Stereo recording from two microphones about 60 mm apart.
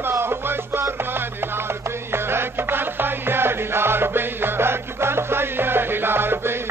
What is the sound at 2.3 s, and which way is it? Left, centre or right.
Music, right.